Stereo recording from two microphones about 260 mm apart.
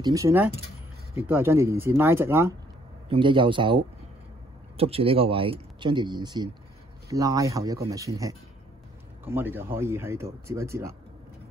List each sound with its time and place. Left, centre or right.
0.0 s speech: centre